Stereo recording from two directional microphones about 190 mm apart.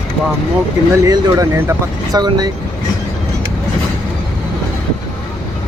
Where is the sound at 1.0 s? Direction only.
20° right (ahead or behind).